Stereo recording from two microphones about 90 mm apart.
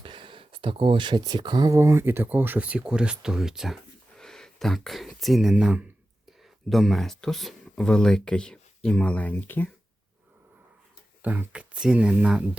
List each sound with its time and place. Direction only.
0.0 s speech: 70° right (ahead or behind); by 1.7 s 50° right (ahead or behind)
1.7 s speech: 30° right (ahead or behind); by 3.8 s 5° right (ahead or behind)
4.2 s speech: 5° left (ahead or behind); by 5.8 s 10° right (ahead or behind)
6.7 s speech: centre (ahead or behind); by 9.6 s 20° left (ahead or behind)
11.2 s speech: 20° right (ahead or behind)